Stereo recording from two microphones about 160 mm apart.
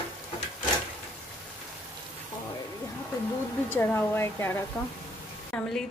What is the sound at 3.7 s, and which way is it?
Speech, 15° left (ahead or behind).